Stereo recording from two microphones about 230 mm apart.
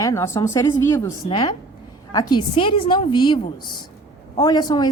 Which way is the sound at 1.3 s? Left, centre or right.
Left.